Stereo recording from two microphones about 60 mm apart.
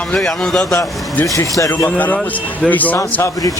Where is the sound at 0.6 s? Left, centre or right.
Left.